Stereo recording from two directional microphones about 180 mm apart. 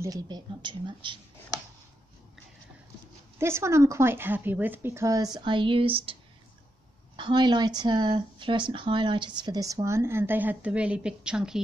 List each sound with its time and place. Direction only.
0.0 s speech: 20° right (ahead or behind)
3.3 s a woman's voice: 15° right (ahead or behind); by 6.1 s 30° right (ahead or behind)
7.2 s speech: 25° right (ahead or behind); by 11.6 s 5° right (ahead or behind)